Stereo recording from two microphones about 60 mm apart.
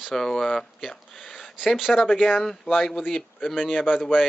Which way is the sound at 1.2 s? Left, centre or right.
Centre.